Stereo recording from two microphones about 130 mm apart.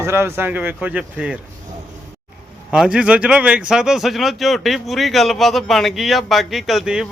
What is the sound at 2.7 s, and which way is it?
A man's voice, 5° right (ahead or behind).